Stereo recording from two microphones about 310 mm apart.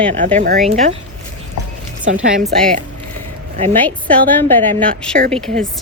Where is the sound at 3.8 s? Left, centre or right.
Centre.